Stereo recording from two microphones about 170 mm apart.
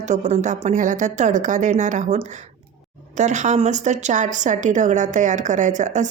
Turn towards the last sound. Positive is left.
turn(degrees=-45)  # may be behind; listen again after turning